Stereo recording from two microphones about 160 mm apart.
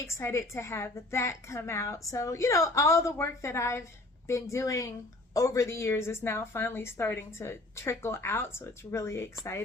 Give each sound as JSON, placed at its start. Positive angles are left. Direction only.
{"t": 0.1, "sound": "a woman's voice", "side_deg": 15}